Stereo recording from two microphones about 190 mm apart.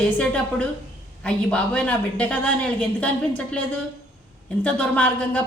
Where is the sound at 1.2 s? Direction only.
5° left (ahead or behind).